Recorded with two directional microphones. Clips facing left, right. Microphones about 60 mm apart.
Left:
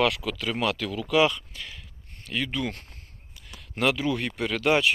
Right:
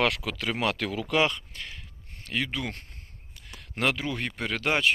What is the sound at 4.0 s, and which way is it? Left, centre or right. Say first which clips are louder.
Speech: left 4 dB; right.